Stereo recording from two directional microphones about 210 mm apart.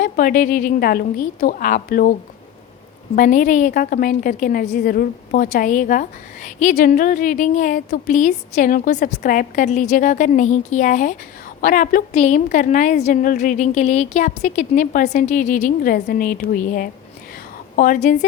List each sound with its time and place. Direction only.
0.0 s a woman's voice: 40° left (ahead or behind)
3.2 s a woman's voice: 35° left (ahead or behind)